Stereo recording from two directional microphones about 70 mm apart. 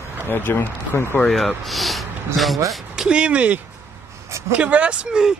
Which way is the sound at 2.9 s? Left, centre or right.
Centre.